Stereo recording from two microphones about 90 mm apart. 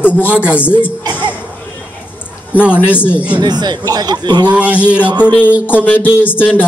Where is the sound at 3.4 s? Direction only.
50° right (ahead or behind).